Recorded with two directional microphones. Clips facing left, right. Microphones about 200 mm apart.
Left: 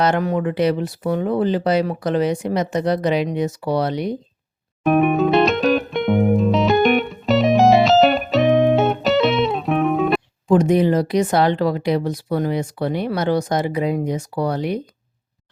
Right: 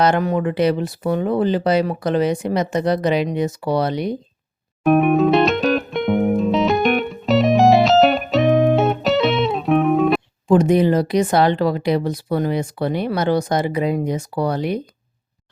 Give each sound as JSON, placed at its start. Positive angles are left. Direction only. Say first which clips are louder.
{"t": 0.0, "sound": "speech", "louder": "right 1 dB", "side_deg": -25}
{"t": 4.8, "sound": "music", "louder": "right 2 dB", "side_deg": 0}
{"t": 10.5, "sound": "speech", "louder": "right 1 dB", "side_deg": -30}